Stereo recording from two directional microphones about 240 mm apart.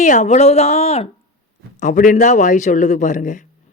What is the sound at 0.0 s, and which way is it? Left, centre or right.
A man's voice, left.